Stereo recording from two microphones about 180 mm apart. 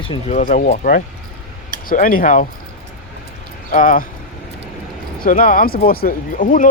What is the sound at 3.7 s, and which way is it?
Speech, 45° left (ahead or behind).